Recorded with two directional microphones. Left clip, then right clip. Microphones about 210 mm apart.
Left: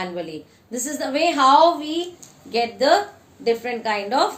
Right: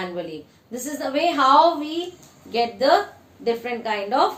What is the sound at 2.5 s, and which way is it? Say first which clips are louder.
A woman's voice: left 1 dB; 35° left (ahead or behind).